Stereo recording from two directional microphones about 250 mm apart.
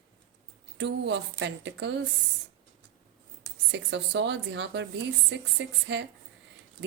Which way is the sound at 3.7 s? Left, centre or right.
Right.